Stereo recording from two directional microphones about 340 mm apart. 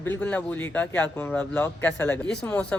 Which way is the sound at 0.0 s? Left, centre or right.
Centre.